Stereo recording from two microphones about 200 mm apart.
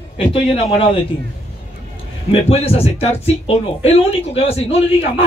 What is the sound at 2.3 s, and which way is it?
A man's voice, 30° left (ahead or behind).